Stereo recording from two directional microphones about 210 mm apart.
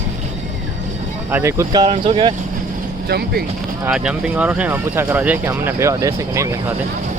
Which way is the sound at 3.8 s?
5° right (ahead or behind).